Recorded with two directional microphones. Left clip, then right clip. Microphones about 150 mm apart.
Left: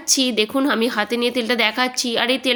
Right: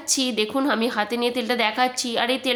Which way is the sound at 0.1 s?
25° left (ahead or behind).